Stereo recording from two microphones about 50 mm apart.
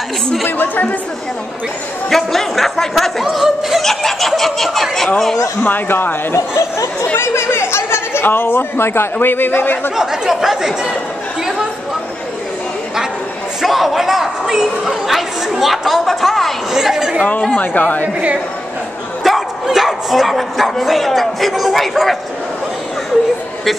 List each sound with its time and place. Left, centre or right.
0.5 s a man's voice: left
2.0 s speech: centre
3.8 s snicker: centre
5.7 s a man's voice: left
6.3 s speech: left
7.2 s a man's voice: left
9.9 s speech: centre
13.6 s speech: centre
17.5 s a man's voice: left
19.2 s speech: centre